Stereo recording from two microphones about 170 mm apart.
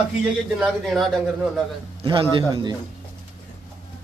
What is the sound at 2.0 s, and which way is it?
Speech, 30° right (ahead or behind).